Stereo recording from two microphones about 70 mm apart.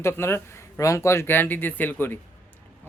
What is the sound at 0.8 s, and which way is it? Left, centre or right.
Speech, left.